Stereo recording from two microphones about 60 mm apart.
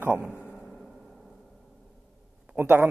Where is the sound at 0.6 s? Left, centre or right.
Centre.